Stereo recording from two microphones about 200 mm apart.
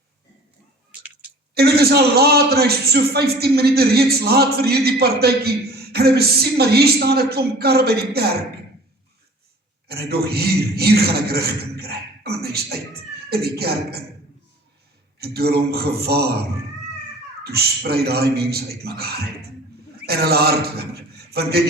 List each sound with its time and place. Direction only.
1.5 s a man's voice: 50° right (ahead or behind)
9.9 s a man's voice: 50° right (ahead or behind)
15.2 s a man's voice: 50° right (ahead or behind)
17.4 s a man's voice: 50° right (ahead or behind)